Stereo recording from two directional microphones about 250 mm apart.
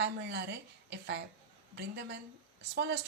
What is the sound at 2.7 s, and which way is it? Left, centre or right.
Speech, right.